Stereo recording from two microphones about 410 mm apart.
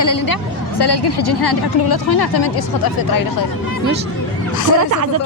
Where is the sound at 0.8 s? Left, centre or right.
Left.